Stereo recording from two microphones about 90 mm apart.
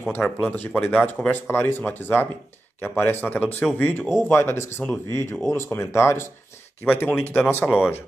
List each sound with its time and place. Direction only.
0.0 s speech: 20° left (ahead or behind)
7.6 s speech: 5° right (ahead or behind)